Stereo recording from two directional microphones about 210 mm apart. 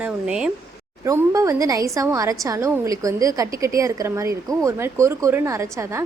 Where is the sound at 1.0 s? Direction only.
15° right (ahead or behind).